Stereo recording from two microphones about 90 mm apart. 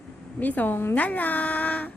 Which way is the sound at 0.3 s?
20° left (ahead or behind).